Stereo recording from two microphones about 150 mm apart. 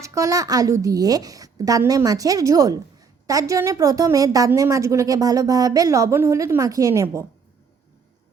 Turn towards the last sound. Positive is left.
turn(degrees=-20)  # may be behind; listen again after turning